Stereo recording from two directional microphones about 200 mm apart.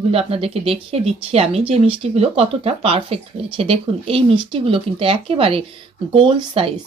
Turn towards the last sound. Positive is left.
turn(degrees=-25)  # may be behind; listen again after turning